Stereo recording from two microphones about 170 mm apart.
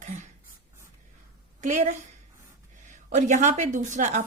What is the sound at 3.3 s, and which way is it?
Speech, 45° right (ahead or behind).